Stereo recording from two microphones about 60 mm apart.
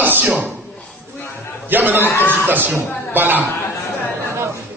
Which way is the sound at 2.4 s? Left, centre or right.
Right.